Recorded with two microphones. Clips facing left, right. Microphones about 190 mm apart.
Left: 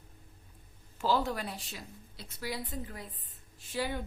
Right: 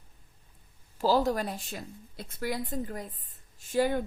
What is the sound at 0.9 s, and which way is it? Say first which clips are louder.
A woman's voice: right 5 dB; 40° right (ahead or behind).